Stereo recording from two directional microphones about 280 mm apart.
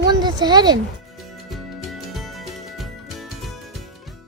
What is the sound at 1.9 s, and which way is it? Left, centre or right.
Music, centre.